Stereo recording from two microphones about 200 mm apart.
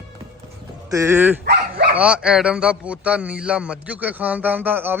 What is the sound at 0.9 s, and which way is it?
A man's voice, 15° right (ahead or behind).